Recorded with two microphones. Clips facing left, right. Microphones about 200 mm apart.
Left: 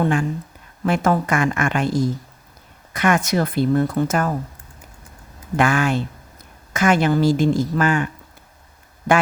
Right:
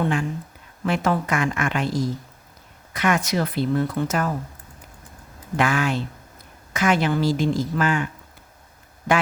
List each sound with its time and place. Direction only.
0.0 s speech: 45° left (ahead or behind)
5.5 s speech: 50° left (ahead or behind)